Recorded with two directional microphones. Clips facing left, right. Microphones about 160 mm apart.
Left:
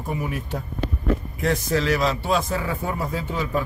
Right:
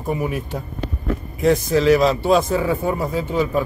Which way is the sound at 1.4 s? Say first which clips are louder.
Right 8 dB; 15° right (ahead or behind).